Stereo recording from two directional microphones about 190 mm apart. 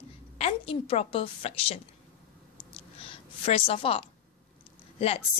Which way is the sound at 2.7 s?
30° left (ahead or behind).